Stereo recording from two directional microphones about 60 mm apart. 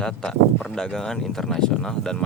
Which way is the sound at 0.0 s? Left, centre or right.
Centre.